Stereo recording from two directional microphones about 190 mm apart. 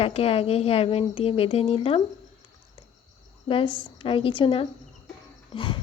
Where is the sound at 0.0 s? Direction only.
30° left (ahead or behind).